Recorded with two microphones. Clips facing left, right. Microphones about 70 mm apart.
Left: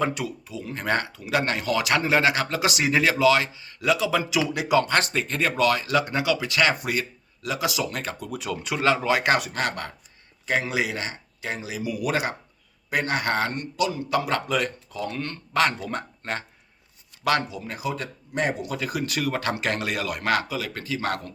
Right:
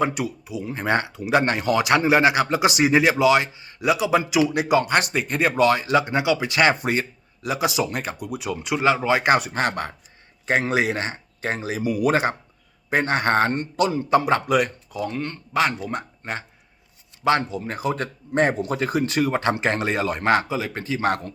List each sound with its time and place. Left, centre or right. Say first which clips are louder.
0.0 s speech: right 3 dB; centre
10.4 s speech: right 4 dB; right; by 16.4 s centre
17.2 s speech: right 3 dB; right